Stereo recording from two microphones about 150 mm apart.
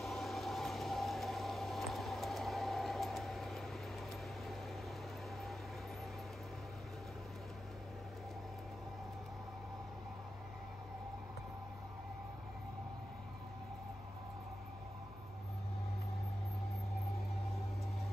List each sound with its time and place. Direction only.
0.0 s vehicle: centre (ahead or behind)